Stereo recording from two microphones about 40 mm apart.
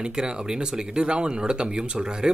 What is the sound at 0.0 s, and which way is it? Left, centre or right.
Speech, right.